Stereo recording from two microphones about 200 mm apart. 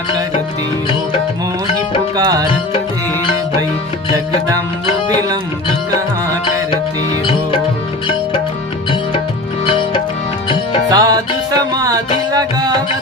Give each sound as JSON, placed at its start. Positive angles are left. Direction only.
{"t": 2.1, "sound": "music", "side_deg": -20}
{"t": 10.8, "sound": "music", "side_deg": -20}